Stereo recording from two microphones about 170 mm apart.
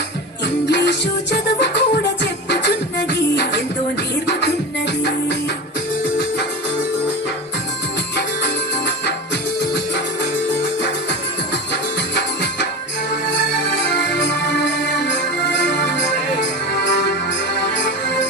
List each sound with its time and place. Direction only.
0.6 s music: 85° left
8.1 s music: 85° left
11.7 s music: 80° left
13.8 s music: 80° left